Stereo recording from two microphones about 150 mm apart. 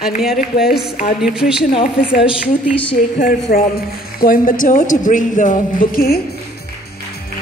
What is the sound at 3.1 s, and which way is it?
A woman's voice, 65° left (ahead or behind).